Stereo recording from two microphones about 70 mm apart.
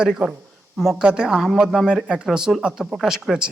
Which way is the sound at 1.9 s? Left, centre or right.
Centre.